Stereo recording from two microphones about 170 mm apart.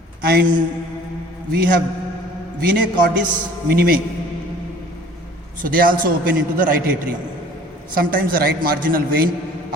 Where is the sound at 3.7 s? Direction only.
60° right (ahead or behind).